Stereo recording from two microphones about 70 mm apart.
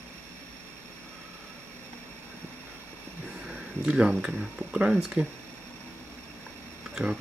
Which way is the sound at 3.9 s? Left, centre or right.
Centre.